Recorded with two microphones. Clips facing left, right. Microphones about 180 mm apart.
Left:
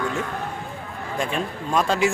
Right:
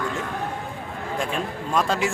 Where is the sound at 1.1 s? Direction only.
Centre (ahead or behind).